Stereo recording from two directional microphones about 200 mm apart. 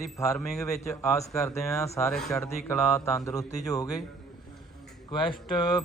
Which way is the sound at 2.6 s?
15° left (ahead or behind).